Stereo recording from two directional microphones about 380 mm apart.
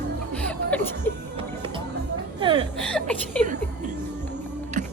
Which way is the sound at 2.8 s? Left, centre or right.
Centre.